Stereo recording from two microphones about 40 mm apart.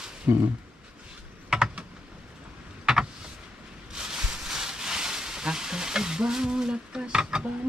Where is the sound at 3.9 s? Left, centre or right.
Centre.